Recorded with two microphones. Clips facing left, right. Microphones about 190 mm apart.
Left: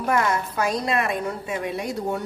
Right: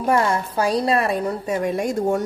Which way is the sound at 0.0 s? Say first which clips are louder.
Right 3 dB; 30° right (ahead or behind).